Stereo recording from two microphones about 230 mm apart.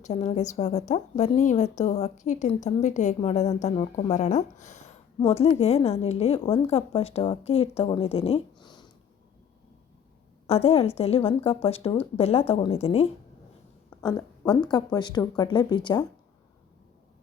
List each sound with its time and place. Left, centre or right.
0.0 s a woman's voice: left
10.4 s a woman's voice: left